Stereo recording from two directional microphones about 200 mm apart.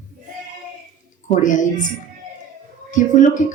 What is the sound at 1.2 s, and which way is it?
Speech, 40° left (ahead or behind).